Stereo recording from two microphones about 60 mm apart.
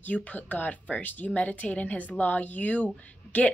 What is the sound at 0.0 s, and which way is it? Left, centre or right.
A woman's voice, left.